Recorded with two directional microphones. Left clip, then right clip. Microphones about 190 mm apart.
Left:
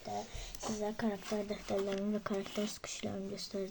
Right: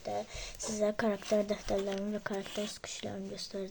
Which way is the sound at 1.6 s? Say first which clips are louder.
Right 2 dB; 25° right (ahead or behind).